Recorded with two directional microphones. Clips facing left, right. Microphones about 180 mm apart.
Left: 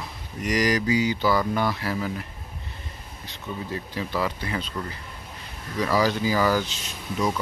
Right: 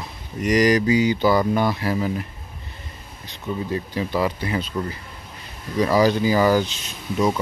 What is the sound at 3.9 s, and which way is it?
Mantra, 20° right (ahead or behind).